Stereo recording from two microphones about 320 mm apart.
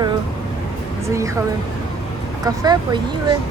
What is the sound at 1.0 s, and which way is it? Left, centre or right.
Speech, centre.